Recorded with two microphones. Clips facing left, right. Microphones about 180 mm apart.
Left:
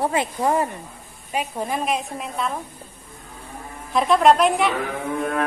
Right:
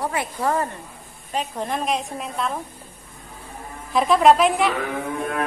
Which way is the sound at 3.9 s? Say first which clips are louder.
Even; centre (ahead or behind).